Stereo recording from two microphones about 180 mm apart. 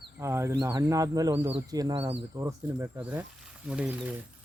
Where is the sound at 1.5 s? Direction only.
25° right (ahead or behind).